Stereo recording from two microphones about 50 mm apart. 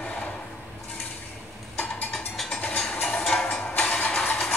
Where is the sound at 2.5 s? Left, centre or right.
Left.